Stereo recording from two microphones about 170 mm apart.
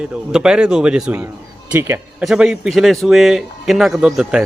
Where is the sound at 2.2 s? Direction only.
5° right (ahead or behind).